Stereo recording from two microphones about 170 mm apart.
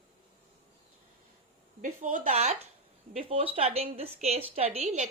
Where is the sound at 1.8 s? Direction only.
50° right (ahead or behind).